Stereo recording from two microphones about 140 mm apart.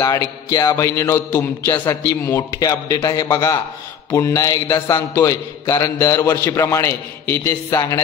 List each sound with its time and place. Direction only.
0.0 s a man's voice: 25° left (ahead or behind)